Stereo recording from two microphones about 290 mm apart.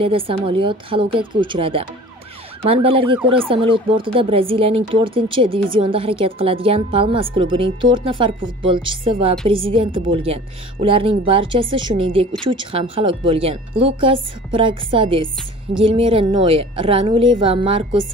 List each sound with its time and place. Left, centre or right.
0.0 s speech: centre